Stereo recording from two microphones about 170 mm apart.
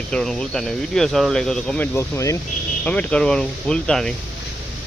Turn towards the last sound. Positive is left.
turn(degrees=5)  # may be behind; listen again after turning